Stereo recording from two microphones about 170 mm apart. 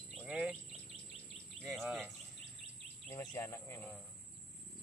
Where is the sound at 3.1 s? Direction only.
15° left (ahead or behind).